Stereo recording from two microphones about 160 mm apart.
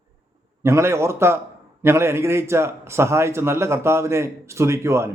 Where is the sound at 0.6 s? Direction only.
15° right (ahead or behind).